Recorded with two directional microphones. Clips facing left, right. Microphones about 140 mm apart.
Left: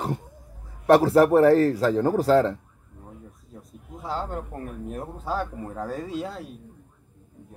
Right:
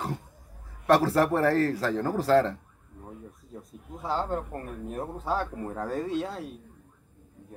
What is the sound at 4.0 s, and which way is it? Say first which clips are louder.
Speech: right 1 dB; centre (ahead or behind).